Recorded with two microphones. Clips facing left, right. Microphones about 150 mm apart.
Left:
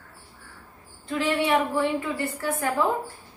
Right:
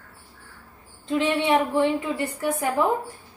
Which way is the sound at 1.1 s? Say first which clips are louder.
Right 2 dB; 20° right (ahead or behind).